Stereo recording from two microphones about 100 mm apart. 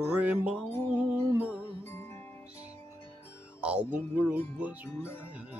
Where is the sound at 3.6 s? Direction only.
10° right (ahead or behind).